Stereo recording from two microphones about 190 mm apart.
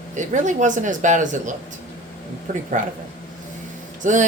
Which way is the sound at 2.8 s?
40° right (ahead or behind).